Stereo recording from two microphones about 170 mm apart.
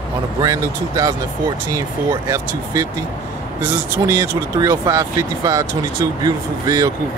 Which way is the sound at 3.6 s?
15° right (ahead or behind).